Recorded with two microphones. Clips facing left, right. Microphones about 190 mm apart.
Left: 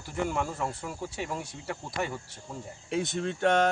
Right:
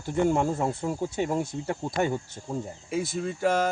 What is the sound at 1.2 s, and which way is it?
Speech, 45° right (ahead or behind).